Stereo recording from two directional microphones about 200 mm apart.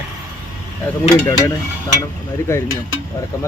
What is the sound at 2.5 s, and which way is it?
Speech, 10° left (ahead or behind).